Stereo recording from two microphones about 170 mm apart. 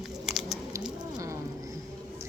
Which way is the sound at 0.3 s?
Centre (ahead or behind).